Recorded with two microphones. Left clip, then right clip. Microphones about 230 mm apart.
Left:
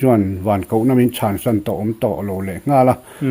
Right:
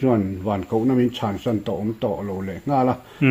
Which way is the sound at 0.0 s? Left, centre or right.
Left.